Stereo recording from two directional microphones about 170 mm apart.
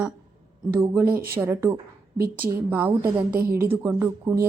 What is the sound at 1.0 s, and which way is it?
Speech, 60° right (ahead or behind).